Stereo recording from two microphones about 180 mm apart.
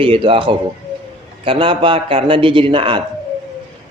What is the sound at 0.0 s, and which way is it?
A man's voice, 30° right (ahead or behind).